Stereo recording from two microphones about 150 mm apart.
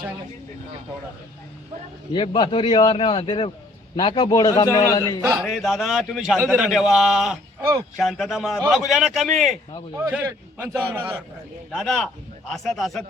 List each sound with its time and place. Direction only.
2.1 s a man's voice: 30° left (ahead or behind)
5.2 s a man's voice: 5° right (ahead or behind)
7.6 s speech: 25° right (ahead or behind)
7.9 s a man's voice: centre (ahead or behind)
11.7 s a man's voice: centre (ahead or behind)